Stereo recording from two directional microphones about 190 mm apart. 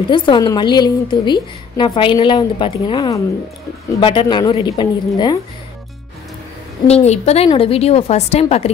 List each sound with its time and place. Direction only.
0.1 s a woman's voice: 25° left (ahead or behind)
6.9 s a woman's voice: 35° left (ahead or behind)